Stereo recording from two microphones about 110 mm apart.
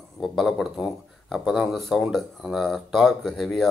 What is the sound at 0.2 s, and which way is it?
Speech, centre (ahead or behind).